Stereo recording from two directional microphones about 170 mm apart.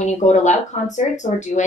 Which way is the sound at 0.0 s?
45° left (ahead or behind).